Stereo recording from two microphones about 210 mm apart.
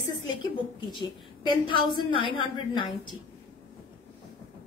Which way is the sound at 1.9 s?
25° left (ahead or behind).